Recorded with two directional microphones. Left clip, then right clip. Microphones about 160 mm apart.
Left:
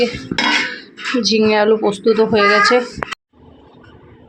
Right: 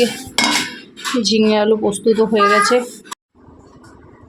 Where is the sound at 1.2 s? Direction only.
20° right (ahead or behind).